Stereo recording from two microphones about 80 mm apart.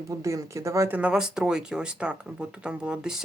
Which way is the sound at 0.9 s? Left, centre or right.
Centre.